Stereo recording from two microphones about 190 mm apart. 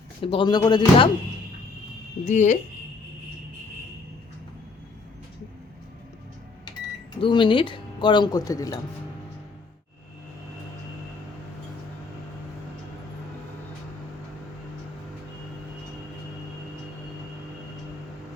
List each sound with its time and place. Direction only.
0.2 s speech: 25° left (ahead or behind)
2.2 s speech: 40° left (ahead or behind)
7.2 s speech: 25° left (ahead or behind)